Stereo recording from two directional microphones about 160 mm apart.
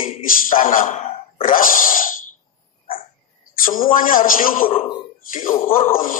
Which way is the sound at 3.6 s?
60° left (ahead or behind).